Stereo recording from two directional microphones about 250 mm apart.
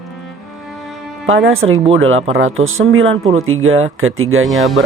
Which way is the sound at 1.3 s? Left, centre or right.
Right.